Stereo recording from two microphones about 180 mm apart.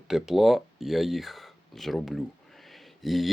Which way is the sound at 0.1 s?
Centre (ahead or behind).